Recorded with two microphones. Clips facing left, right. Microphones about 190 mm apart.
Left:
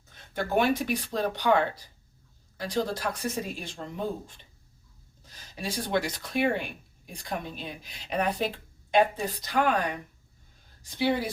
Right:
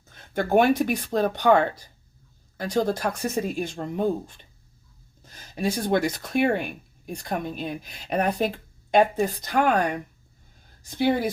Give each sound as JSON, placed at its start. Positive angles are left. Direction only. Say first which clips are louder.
{"t": 0.1, "sound": "speech", "louder": "right 6 dB", "side_deg": -50}
{"t": 5.2, "sound": "speech", "louder": "right 9 dB", "side_deg": -50}